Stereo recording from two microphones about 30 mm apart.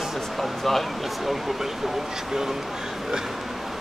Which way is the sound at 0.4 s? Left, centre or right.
Centre.